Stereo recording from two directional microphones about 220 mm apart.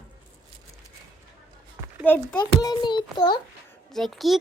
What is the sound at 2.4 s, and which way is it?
A child's voice, 20° left (ahead or behind).